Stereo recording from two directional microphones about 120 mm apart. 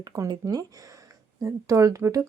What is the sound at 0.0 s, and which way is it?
Speech, 30° right (ahead or behind).